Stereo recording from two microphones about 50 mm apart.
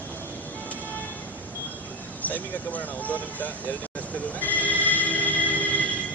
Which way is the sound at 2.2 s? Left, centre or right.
Left.